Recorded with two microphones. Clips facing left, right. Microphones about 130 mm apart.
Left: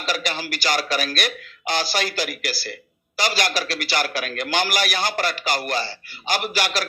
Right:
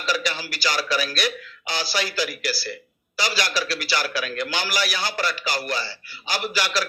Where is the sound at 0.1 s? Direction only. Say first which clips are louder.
Even; 50° left (ahead or behind).